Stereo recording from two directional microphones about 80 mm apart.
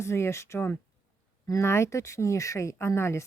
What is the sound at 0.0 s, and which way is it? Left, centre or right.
Speech, left.